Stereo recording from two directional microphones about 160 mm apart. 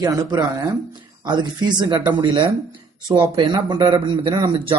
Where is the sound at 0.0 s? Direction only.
20° right (ahead or behind).